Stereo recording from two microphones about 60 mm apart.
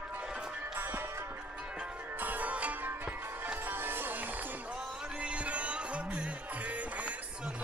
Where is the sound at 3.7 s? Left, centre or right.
Right.